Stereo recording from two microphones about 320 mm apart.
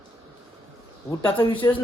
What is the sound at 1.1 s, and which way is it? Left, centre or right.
Speech, centre.